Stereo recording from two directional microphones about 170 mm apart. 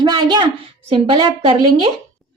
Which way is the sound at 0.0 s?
25° right (ahead or behind).